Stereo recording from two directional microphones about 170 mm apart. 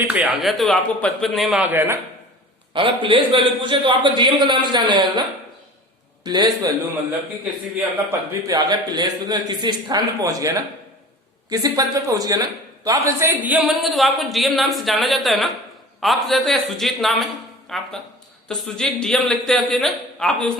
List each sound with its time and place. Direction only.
0.0 s a man's voice: 10° right (ahead or behind)
2.7 s a man's voice: 30° right (ahead or behind)
6.2 s a man's voice: 25° right (ahead or behind)
8.3 s a man's voice: 20° right (ahead or behind); by 20.5 s 5° left (ahead or behind)